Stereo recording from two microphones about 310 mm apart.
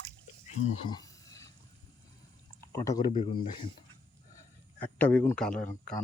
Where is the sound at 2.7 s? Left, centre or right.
Centre.